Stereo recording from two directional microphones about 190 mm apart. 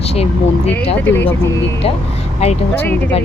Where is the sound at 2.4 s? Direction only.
35° left (ahead or behind).